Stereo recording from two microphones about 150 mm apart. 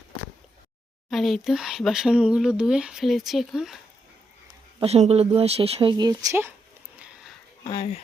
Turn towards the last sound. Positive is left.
turn(degrees=40)  # may be behind; listen again after turning